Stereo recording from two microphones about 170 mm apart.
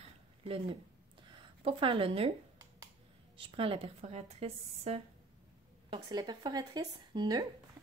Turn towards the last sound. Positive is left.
turn(degrees=-25)  # may be behind; listen again after turning